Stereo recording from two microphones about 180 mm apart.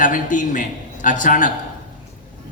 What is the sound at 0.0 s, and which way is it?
A man's voice, 45° left (ahead or behind).